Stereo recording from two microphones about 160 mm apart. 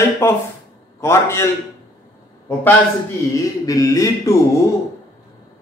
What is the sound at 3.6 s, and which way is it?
Speech, 20° left (ahead or behind).